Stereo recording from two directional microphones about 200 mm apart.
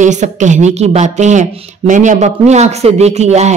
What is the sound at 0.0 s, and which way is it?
Speech, 35° right (ahead or behind).